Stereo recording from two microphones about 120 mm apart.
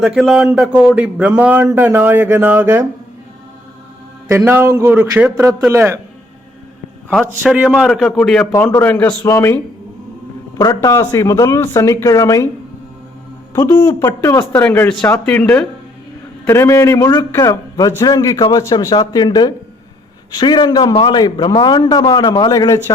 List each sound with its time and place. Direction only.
0.0 s speech: 5° right (ahead or behind)
4.3 s speech: 20° right (ahead or behind)
7.4 s a man's voice: 5° right (ahead or behind)
8.5 s speech: 20° left (ahead or behind)
9.2 s speech: 25° left (ahead or behind)
10.8 s speech: 25° left (ahead or behind)
13.5 s speech: 25° left (ahead or behind)
14.2 s speech: 20° left (ahead or behind)
16.5 s a man's voice: 25° left (ahead or behind)